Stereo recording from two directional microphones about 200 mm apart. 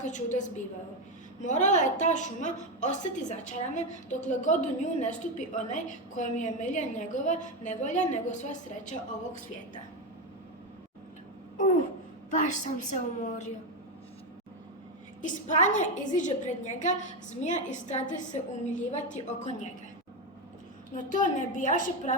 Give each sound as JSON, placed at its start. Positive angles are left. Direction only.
{"t": 0.0, "sound": "a woman's voice", "side_deg": 40}
{"t": 12.3, "sound": "a woman's voice", "side_deg": 40}
{"t": 15.2, "sound": "a woman's voice", "side_deg": 40}
{"t": 20.9, "sound": "a woman's voice", "side_deg": 40}